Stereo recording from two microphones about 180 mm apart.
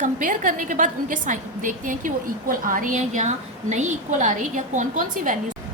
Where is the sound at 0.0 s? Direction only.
45° right (ahead or behind).